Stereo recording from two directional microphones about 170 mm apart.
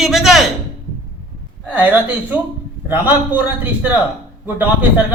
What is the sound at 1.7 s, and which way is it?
A man's voice, 10° right (ahead or behind).